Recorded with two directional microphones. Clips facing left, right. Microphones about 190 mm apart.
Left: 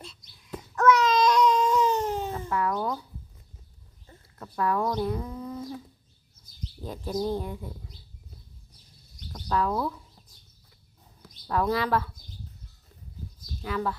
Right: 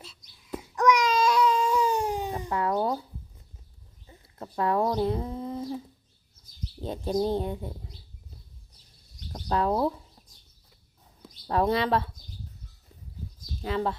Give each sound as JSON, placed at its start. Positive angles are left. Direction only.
{"t": 0.0, "sound": "a sound", "side_deg": 0}
{"t": 0.8, "sound": "babbling", "side_deg": -15}
{"t": 4.4, "sound": "a sound", "side_deg": -25}
{"t": 6.8, "sound": "speech", "side_deg": -25}
{"t": 9.3, "sound": "speech", "side_deg": -30}
{"t": 11.4, "sound": "speech", "side_deg": -30}
{"t": 13.6, "sound": "speech", "side_deg": -25}